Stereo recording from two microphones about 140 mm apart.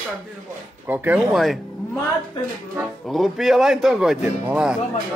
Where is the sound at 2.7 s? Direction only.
Centre (ahead or behind).